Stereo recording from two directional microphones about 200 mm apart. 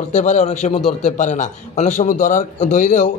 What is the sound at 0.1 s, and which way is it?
A man's voice, 35° left (ahead or behind).